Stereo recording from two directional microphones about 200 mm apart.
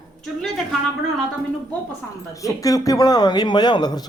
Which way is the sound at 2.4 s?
15° left (ahead or behind).